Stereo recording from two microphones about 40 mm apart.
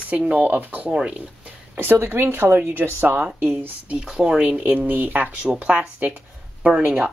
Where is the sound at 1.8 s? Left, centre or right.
Right.